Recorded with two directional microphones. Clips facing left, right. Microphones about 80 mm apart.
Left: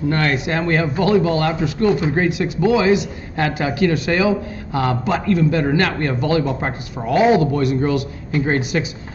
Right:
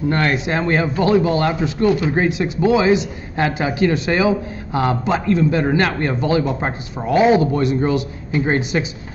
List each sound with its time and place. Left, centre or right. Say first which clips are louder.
0.1 s speech: right 1 dB; right